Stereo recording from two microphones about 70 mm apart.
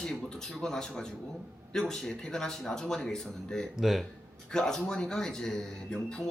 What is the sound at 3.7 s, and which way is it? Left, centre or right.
Speech, centre.